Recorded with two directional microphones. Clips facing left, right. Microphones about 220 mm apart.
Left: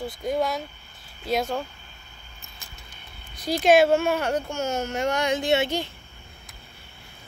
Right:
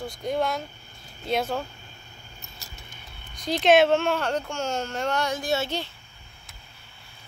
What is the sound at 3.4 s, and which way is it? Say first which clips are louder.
Speech: left 1 dB; 10° left (ahead or behind).